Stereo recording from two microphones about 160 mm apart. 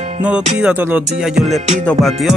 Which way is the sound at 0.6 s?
10° right (ahead or behind).